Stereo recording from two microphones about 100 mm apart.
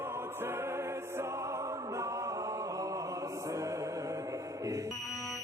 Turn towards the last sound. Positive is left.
turn(degrees=35)  # may be behind; listen again after turning